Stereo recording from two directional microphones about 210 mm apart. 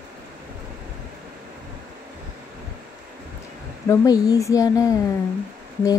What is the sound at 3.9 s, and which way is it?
Speech, 15° left (ahead or behind).